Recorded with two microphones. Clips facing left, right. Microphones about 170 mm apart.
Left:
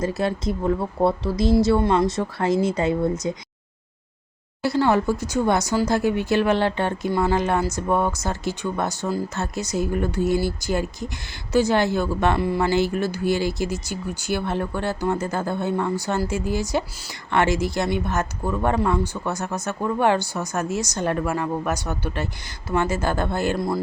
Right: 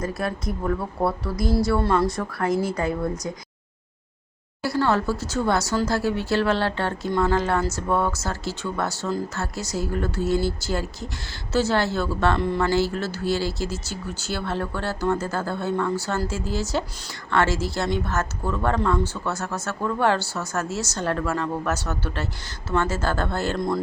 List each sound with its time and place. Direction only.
0.0 s a woman's voice: 25° left (ahead or behind)
4.6 s speech: 20° left (ahead or behind)